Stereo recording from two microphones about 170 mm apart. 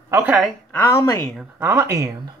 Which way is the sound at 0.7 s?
20° left (ahead or behind).